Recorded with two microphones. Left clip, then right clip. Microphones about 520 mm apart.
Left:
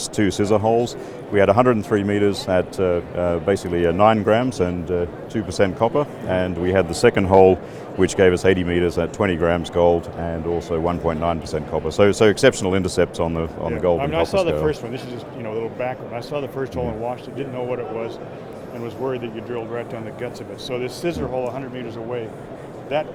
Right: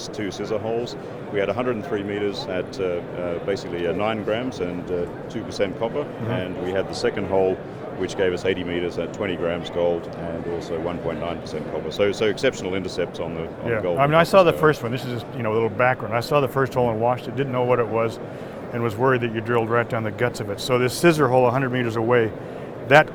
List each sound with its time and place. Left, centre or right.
0.2 s speech: left
14.0 s speech: right